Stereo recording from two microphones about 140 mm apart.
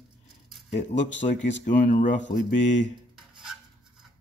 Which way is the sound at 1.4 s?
65° left (ahead or behind).